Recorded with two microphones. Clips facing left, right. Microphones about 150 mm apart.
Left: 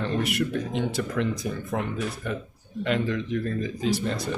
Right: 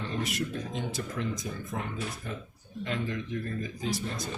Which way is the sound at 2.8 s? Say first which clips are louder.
Left 7 dB; 85° left.